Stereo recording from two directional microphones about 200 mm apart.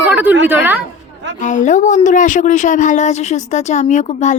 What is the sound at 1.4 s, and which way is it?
A woman's voice, 35° left (ahead or behind).